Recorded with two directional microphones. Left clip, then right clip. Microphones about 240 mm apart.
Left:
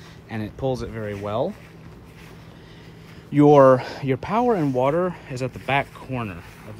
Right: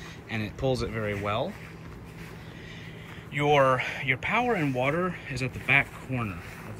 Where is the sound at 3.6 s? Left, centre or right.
Left.